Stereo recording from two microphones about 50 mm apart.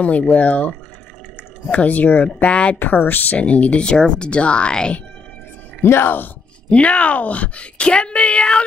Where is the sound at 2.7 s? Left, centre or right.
Left.